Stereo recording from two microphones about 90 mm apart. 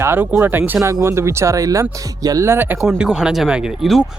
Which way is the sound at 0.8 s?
35° right (ahead or behind).